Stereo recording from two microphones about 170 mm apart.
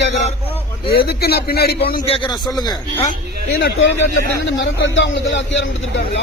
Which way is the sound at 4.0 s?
90° left.